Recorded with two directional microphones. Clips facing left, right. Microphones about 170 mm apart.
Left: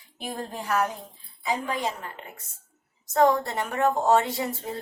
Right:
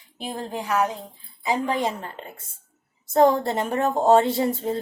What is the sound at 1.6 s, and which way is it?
A woman's voice, 30° right (ahead or behind).